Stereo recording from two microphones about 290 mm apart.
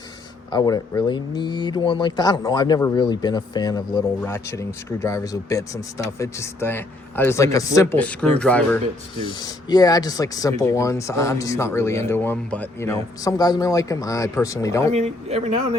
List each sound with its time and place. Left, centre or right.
0.5 s speech: centre
14.9 s a man's voice: right